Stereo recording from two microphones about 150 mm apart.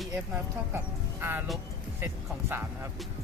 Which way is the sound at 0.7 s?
15° right (ahead or behind).